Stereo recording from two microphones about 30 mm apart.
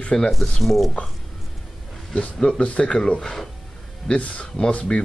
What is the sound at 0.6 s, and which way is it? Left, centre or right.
Speech, centre.